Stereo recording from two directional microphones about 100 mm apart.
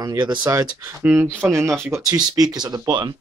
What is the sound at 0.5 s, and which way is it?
Speech, 35° right (ahead or behind).